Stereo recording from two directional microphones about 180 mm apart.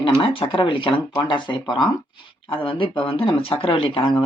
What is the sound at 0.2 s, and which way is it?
Speech, 30° left (ahead or behind).